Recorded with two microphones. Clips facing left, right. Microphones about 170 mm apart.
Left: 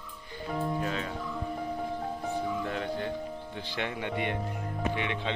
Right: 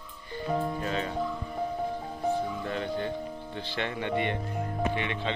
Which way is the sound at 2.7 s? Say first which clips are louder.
Right 1 dB; centre (ahead or behind).